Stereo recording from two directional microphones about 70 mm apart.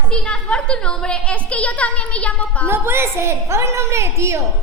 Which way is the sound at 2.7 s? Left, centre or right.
Right.